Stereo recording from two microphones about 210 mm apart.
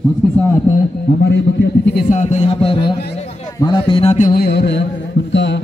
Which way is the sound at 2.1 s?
35° left (ahead or behind).